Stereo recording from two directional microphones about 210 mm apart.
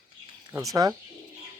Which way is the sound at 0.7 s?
15° right (ahead or behind).